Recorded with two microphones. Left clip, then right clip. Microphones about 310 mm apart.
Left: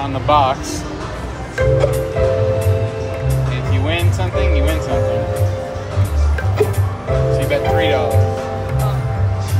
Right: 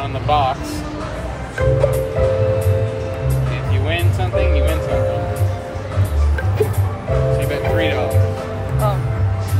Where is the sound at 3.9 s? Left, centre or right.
Left.